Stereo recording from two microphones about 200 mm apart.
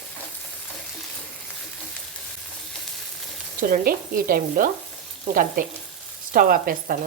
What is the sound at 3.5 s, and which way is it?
Speech, 45° right (ahead or behind).